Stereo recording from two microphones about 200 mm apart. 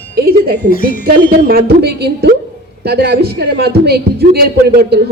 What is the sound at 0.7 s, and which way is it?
Speech, 45° left (ahead or behind).